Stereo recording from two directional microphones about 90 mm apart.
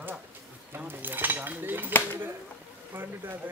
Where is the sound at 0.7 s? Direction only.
20° right (ahead or behind).